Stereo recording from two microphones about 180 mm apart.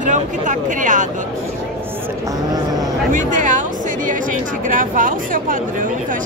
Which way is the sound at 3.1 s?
45° right (ahead or behind).